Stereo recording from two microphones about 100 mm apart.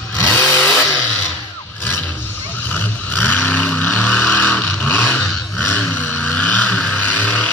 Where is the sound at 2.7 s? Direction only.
15° left (ahead or behind).